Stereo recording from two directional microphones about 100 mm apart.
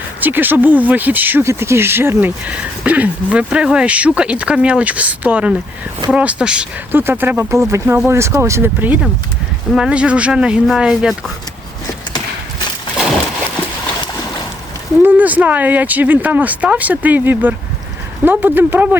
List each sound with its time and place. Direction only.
0.2 s speech: 20° right (ahead or behind)
6.9 s speech: 20° right (ahead or behind)
9.7 s speech: 10° right (ahead or behind)
15.0 s speech: 15° right (ahead or behind)